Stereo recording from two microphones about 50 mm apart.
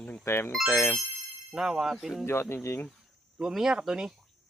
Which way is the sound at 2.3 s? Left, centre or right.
Left.